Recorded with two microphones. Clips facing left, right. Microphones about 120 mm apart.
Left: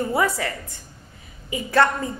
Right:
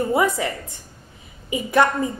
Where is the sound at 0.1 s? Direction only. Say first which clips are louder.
Right 2 dB; 20° right (ahead or behind).